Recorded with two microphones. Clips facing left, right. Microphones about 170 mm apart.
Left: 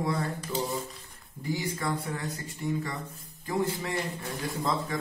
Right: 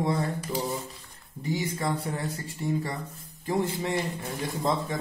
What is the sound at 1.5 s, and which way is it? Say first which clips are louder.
A man's voice: right 2 dB; 25° right (ahead or behind).